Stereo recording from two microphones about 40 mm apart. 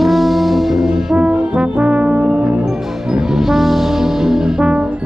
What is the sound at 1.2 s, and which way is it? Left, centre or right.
Brass instrument, right.